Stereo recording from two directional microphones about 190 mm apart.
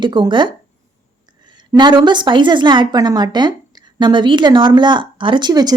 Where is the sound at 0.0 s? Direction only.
25° right (ahead or behind).